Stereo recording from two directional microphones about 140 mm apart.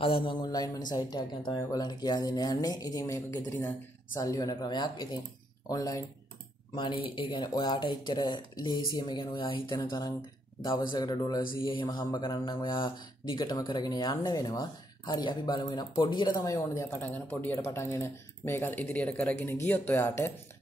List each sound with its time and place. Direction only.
0.0 s speech: 40° left (ahead or behind); by 20.3 s 15° left (ahead or behind)